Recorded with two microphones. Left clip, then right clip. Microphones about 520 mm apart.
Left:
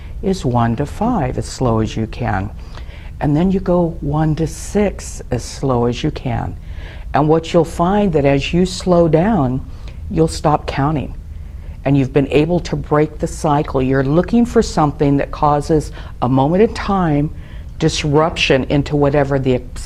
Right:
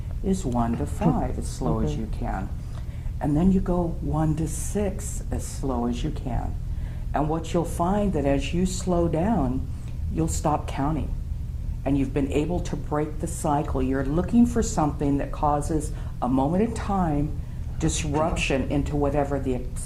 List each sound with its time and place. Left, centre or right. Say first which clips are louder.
0.3 s speech: left 9 dB; left
3.2 s a woman's voice: left 8 dB; left
5.3 s a woman's voice: left 12 dB; left